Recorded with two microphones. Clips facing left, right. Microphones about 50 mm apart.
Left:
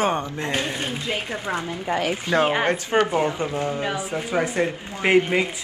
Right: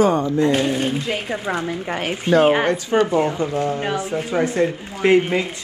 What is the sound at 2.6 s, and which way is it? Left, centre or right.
Speech, left.